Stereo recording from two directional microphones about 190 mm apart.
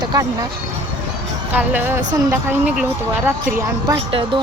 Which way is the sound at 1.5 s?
10° right (ahead or behind).